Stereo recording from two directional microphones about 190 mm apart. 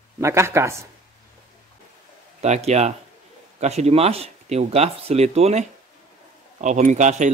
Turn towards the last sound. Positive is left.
turn(degrees=-40)  # may be behind; listen again after turning